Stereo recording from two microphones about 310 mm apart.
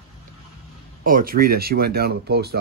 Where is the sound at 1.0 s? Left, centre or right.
Right.